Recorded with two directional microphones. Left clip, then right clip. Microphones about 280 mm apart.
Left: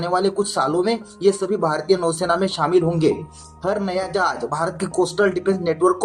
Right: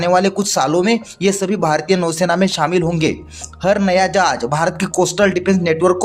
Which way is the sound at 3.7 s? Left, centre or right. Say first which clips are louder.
Right 7 dB; right.